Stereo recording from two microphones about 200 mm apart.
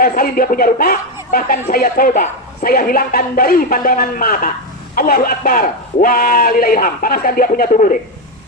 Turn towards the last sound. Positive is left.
turn(degrees=40)  # may be behind; listen again after turning